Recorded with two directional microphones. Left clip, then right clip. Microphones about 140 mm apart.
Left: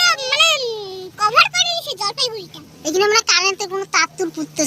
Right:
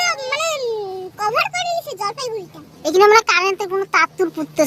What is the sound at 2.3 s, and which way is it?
Speech, 45° right (ahead or behind).